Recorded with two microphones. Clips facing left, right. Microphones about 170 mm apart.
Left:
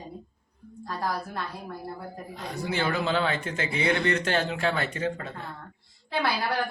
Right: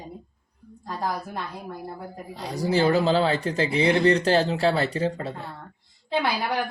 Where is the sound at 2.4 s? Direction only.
35° right (ahead or behind).